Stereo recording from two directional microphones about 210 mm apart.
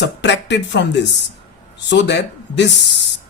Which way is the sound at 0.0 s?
55° left (ahead or behind).